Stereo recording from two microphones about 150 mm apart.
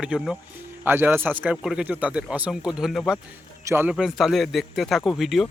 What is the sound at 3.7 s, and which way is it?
Speech, 15° right (ahead or behind).